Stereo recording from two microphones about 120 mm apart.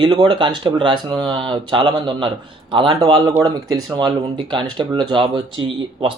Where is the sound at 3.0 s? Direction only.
35° right (ahead or behind).